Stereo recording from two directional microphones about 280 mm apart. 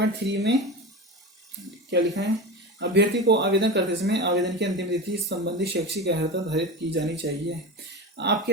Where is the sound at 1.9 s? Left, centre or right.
Right.